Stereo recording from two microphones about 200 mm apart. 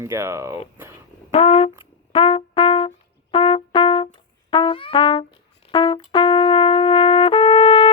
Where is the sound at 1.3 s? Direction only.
30° left (ahead or behind).